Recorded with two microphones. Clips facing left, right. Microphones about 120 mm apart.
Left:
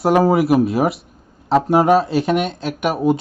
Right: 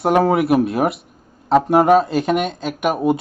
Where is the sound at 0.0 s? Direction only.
Centre (ahead or behind).